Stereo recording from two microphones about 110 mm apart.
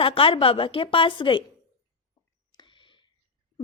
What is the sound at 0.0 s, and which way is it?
A woman's voice, 55° left (ahead or behind).